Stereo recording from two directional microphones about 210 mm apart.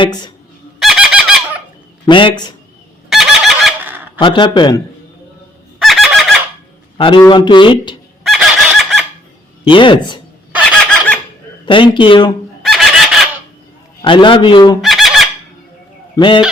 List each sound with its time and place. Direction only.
0.0 s speech: 20° left (ahead or behind)
0.8 s a sound: centre (ahead or behind)
2.0 s speech: 25° left (ahead or behind)
3.1 s fowl: centre (ahead or behind)
4.2 s speech: 25° left (ahead or behind)
5.8 s fowl: centre (ahead or behind)
6.9 s speech: 25° left (ahead or behind)
8.2 s fowl: centre (ahead or behind)
9.6 s speech: 25° left (ahead or behind)
11.6 s speech: 25° left (ahead or behind)
12.6 s fowl: centre (ahead or behind)
14.0 s speech: 25° left (ahead or behind)
14.8 s fowl: centre (ahead or behind)
16.1 s speech: 20° left (ahead or behind)